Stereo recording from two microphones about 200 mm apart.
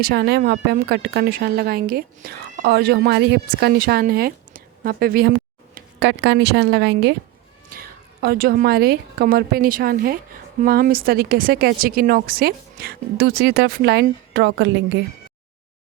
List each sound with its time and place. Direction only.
0.0 s a woman's voice: 55° right (ahead or behind)
5.7 s speech: 60° right (ahead or behind)
7.7 s a woman's voice: 50° right (ahead or behind)